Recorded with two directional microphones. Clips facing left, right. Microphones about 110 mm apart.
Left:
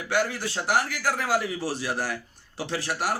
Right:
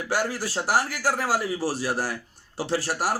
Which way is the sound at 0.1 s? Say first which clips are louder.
Left 1 dB; 40° right (ahead or behind).